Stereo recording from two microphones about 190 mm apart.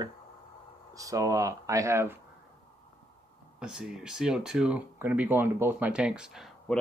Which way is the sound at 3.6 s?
5° right (ahead or behind).